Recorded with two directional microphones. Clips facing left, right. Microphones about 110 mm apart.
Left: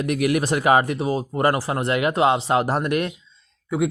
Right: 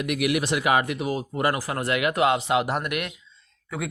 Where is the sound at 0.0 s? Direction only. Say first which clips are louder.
Left 3 dB; 35° left (ahead or behind).